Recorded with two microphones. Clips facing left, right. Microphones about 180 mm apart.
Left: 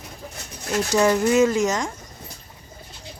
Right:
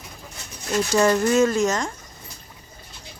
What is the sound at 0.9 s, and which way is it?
Speech, 15° left (ahead or behind).